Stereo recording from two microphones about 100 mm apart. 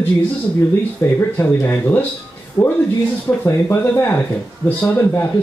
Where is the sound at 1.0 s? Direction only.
20° left (ahead or behind).